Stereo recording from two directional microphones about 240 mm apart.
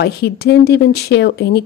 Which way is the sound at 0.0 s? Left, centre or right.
Left.